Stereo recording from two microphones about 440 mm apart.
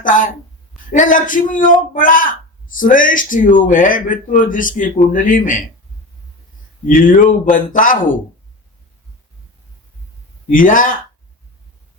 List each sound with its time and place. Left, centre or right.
0.0 s speech: centre
6.8 s speech: centre
10.5 s speech: centre